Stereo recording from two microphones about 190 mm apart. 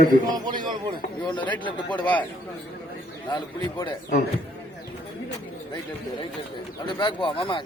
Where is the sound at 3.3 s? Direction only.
25° left (ahead or behind).